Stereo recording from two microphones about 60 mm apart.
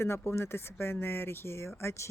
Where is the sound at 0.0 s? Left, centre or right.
Left.